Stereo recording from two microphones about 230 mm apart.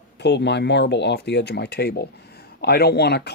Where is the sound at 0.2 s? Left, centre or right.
Left.